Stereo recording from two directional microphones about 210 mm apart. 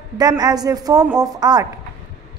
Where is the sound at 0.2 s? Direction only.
20° right (ahead or behind).